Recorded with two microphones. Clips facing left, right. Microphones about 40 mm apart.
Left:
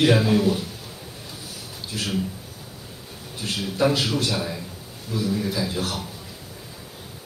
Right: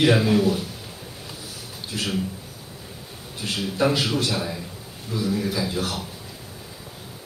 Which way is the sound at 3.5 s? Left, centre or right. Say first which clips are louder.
Even; centre.